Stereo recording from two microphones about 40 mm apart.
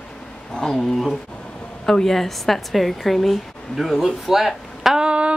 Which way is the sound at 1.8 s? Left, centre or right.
Centre.